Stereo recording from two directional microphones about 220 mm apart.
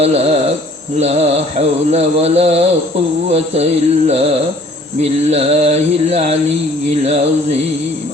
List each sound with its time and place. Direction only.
0.0 s mantra: 30° right (ahead or behind)
5.3 s mantra: 30° right (ahead or behind)